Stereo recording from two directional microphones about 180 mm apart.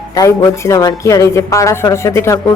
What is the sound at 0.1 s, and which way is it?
A woman's voice, 15° left (ahead or behind).